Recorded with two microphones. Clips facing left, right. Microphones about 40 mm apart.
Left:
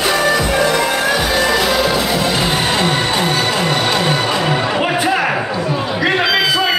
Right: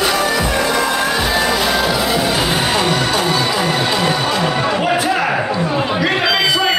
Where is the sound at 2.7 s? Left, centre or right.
Left.